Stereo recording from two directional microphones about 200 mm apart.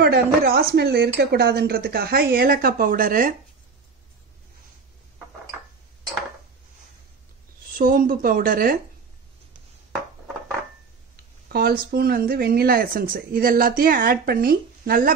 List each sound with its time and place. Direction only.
0.0 s speech: 50° right (ahead or behind)
7.7 s speech: 45° right (ahead or behind)
11.4 s speech: 50° right (ahead or behind)